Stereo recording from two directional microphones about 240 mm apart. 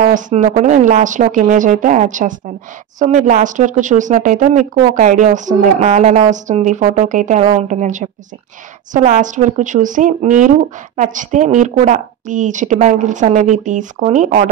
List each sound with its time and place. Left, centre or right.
0.0 s speech: right